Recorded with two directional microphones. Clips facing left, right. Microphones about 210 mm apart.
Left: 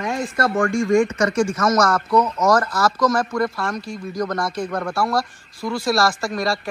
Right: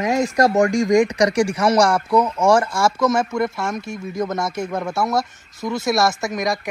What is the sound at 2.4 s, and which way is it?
Speech, 30° right (ahead or behind).